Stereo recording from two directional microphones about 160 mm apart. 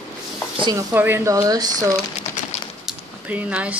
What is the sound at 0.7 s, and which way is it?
Speech, 15° right (ahead or behind).